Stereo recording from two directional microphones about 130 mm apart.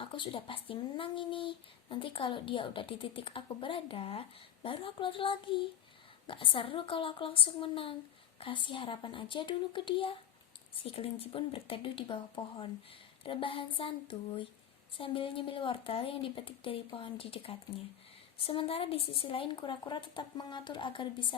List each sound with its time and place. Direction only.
0.0 s speech: 40° left (ahead or behind)